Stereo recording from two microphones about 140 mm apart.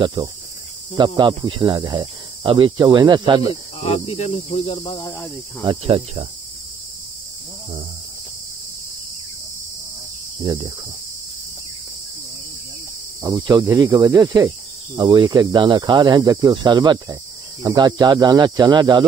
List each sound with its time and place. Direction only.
0.0 s speech: 30° right (ahead or behind)
3.8 s speech: 45° left (ahead or behind)
5.6 s speech: 35° right (ahead or behind)
10.4 s speech: 35° right (ahead or behind)
13.2 s cricket: 30° right (ahead or behind)
15.0 s speech: 30° right (ahead or behind)